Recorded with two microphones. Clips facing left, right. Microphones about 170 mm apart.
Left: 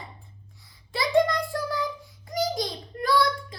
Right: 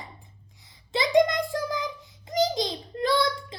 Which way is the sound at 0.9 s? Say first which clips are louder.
Right 1 dB; 20° right (ahead or behind).